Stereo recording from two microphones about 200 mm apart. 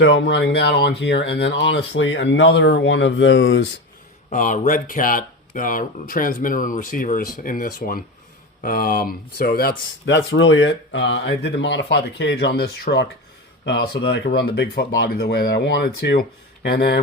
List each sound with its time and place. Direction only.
0.0 s speech: 65° left (ahead or behind)
4.3 s speech: 40° left (ahead or behind)